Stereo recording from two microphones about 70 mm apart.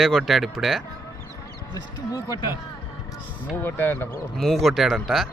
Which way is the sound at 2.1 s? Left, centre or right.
Left.